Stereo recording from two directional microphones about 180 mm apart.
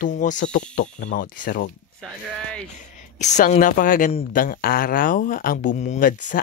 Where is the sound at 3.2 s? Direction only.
40° left (ahead or behind).